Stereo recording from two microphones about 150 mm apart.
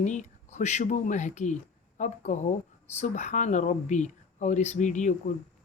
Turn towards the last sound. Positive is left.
turn(degrees=55)  # may be behind; listen again after turning